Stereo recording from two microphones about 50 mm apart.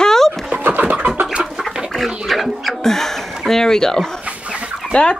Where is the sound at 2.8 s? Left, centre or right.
Centre.